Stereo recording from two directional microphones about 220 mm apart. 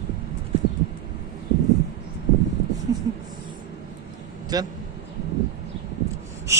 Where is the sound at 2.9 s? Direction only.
15° right (ahead or behind).